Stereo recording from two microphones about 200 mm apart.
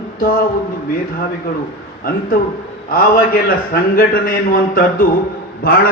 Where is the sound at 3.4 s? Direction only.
45° left (ahead or behind).